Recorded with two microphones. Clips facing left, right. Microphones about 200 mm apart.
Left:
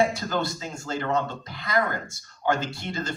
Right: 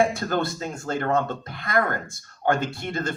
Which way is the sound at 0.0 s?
55° right (ahead or behind).